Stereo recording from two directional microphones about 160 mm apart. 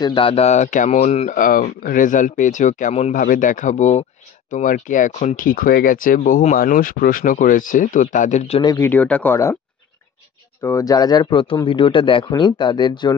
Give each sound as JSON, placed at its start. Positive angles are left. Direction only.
{"t": 0.0, "sound": "speech", "side_deg": 30}
{"t": 3.2, "sound": "speech", "side_deg": 55}
{"t": 8.7, "sound": "speech", "side_deg": 15}
{"t": 10.6, "sound": "speech", "side_deg": 20}